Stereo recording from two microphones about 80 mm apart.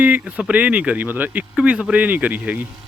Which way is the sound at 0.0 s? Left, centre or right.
Centre.